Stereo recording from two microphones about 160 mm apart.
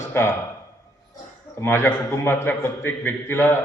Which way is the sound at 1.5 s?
15° left (ahead or behind).